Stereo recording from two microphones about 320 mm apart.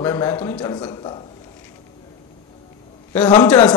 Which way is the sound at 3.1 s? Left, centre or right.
Centre.